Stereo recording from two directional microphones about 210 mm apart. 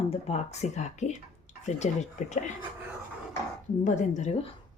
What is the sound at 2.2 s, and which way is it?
Speech, 35° left (ahead or behind).